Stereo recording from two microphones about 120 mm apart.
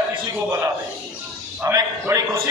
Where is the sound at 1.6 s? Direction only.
25° right (ahead or behind).